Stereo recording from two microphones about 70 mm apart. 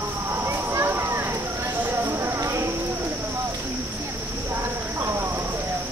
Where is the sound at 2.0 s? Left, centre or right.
Right.